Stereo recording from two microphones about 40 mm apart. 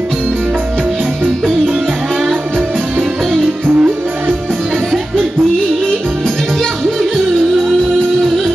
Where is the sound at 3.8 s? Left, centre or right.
Right.